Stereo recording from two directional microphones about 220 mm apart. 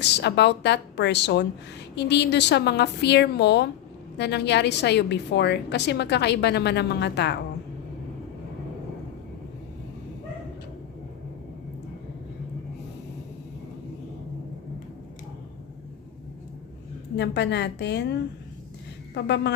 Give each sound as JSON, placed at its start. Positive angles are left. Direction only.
{"t": 0.0, "sound": "a woman's voice", "side_deg": 50}
{"t": 17.2, "sound": "a woman's voice", "side_deg": 50}